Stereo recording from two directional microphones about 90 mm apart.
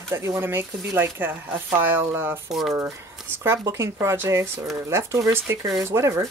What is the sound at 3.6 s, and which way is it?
Speech, 30° right (ahead or behind).